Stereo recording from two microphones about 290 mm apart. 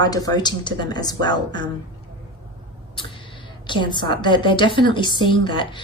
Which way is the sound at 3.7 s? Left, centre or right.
Centre.